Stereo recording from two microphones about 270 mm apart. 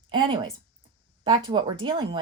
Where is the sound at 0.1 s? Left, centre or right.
Centre.